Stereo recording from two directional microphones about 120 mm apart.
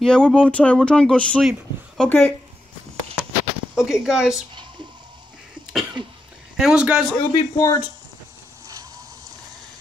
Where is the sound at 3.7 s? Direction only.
5° right (ahead or behind).